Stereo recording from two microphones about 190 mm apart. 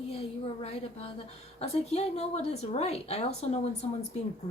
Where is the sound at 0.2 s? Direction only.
35° left (ahead or behind).